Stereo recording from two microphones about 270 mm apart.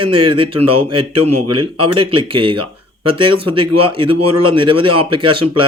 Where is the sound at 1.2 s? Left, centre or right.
Right.